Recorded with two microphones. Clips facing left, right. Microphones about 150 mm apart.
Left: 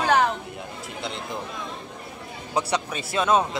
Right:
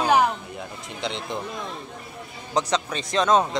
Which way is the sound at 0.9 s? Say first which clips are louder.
Right 3 dB; 5° left (ahead or behind).